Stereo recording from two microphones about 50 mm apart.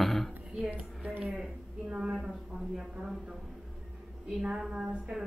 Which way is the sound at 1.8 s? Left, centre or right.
Right.